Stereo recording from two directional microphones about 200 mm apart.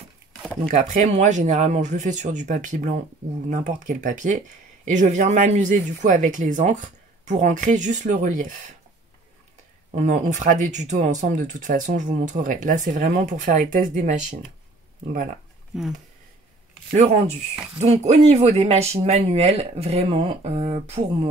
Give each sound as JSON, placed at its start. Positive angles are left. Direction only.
{"t": 0.6, "sound": "speech", "side_deg": -35}
{"t": 9.8, "sound": "speech", "side_deg": -40}
{"t": 15.7, "sound": "speech", "side_deg": -5}
{"t": 17.7, "sound": "speech", "side_deg": -35}